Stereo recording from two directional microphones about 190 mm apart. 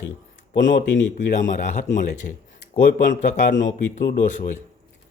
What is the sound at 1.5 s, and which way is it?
Speech, 40° left (ahead or behind).